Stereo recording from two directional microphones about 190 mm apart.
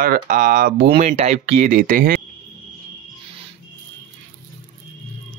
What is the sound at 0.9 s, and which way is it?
Speech, 35° right (ahead or behind).